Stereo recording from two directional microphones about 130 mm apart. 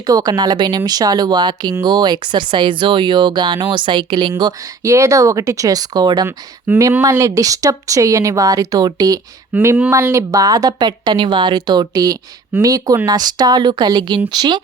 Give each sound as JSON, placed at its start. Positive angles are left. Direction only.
{"t": 0.0, "sound": "speech", "side_deg": -30}
{"t": 6.2, "sound": "speech", "side_deg": -20}
{"t": 9.5, "sound": "speech", "side_deg": -10}
{"t": 9.9, "sound": "speech", "side_deg": -25}